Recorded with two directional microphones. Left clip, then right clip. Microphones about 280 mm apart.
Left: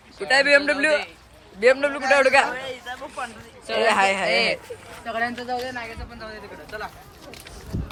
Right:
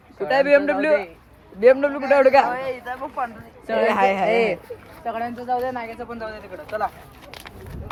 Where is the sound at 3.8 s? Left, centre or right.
Centre.